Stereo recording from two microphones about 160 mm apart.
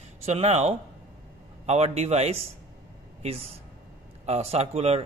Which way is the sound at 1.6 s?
40° right (ahead or behind).